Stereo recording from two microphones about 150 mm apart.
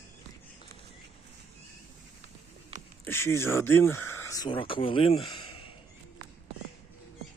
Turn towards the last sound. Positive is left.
turn(degrees=40)  # may be behind; listen again after turning